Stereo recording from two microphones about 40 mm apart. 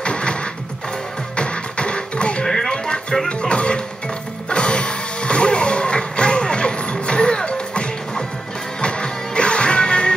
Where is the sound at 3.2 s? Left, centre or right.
Left.